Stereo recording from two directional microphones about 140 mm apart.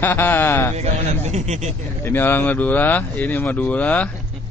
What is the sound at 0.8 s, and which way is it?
Speech, 55° right (ahead or behind).